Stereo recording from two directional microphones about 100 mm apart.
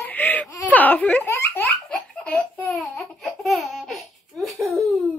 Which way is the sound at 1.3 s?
25° left (ahead or behind).